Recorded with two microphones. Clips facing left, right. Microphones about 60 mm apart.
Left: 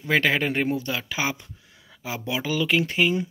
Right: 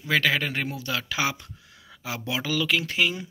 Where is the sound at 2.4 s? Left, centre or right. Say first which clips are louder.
Left 3 dB; left.